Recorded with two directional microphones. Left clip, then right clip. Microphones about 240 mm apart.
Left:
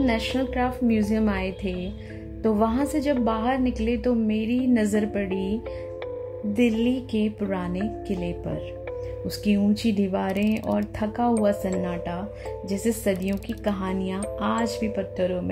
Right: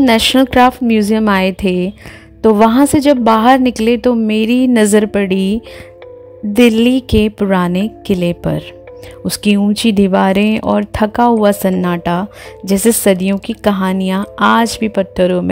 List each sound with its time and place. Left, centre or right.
0.0 s speech: right